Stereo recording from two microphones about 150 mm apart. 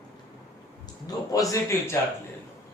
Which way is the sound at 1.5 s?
20° left (ahead or behind).